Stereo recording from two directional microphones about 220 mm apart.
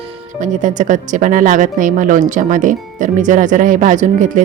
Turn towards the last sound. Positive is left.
turn(degrees=-35)  # may be behind; listen again after turning